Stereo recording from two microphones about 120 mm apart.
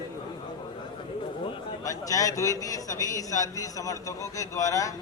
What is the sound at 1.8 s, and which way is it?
A man's voice, 30° left (ahead or behind).